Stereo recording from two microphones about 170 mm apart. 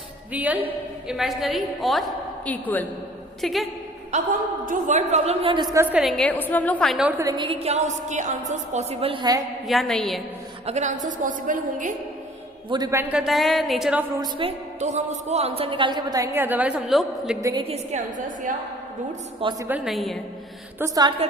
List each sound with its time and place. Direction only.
0.3 s a woman's voice: 10° right (ahead or behind)
4.1 s a woman's voice: 50° right (ahead or behind); by 5.6 s 35° right (ahead or behind)
5.7 s a woman's voice: 10° right (ahead or behind)
7.2 s a woman's voice: 25° right (ahead or behind)
9.6 s a woman's voice: centre (ahead or behind)
10.7 s a woman's voice: 45° right (ahead or behind)
12.7 s a woman's voice: 20° right (ahead or behind); by 14.0 s centre (ahead or behind)
14.2 s a woman's voice: 30° right (ahead or behind); by 17.3 s centre (ahead or behind)
17.4 s a woman's voice: 30° right (ahead or behind)
19.4 s a woman's voice: 30° right (ahead or behind)
19.6 s a woman's voice: 5° right (ahead or behind)
20.7 s a woman's voice: 20° right (ahead or behind)